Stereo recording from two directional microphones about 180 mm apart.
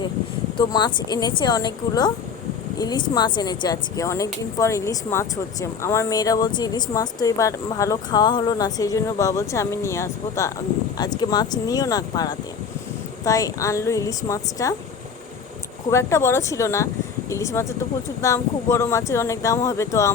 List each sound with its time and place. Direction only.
0.5 s speech: 25° left (ahead or behind)
15.9 s speech: 15° left (ahead or behind)